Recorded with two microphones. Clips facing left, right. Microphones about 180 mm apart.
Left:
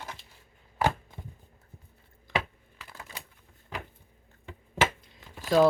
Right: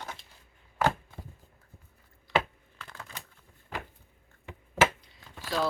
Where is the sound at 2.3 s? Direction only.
50° left (ahead or behind).